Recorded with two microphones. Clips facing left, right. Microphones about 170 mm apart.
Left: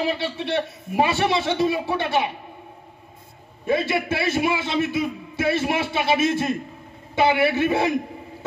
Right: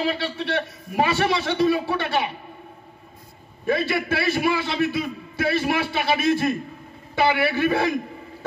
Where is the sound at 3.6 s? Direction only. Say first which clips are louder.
Left 1 dB; 25° left (ahead or behind).